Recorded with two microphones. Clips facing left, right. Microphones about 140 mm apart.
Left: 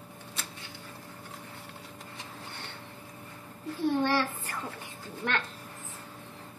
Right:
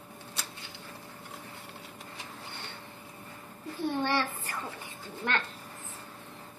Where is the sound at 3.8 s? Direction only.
Centre (ahead or behind).